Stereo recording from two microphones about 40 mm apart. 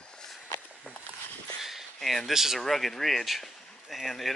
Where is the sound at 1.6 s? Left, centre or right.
Centre.